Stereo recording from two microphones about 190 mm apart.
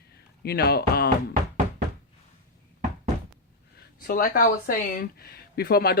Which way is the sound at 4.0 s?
50° left (ahead or behind).